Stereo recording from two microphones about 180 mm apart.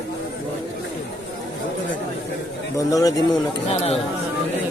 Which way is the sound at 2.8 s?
20° left (ahead or behind).